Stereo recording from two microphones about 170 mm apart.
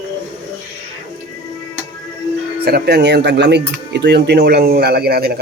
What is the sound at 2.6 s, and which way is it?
A man's voice, 65° right (ahead or behind).